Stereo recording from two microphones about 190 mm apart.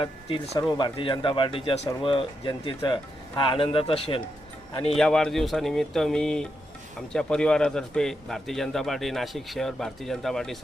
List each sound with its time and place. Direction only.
0.0 s speech: 30° left (ahead or behind)
4.9 s a man's voice: 5° left (ahead or behind)